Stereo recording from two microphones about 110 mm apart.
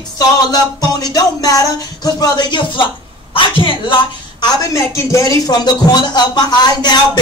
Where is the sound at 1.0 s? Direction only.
35° left (ahead or behind); by 3.7 s 50° left (ahead or behind).